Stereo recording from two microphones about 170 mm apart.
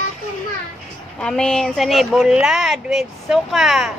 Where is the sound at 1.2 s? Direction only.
5° left (ahead or behind).